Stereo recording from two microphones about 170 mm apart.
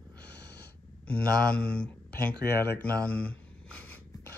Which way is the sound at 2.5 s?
10° left (ahead or behind).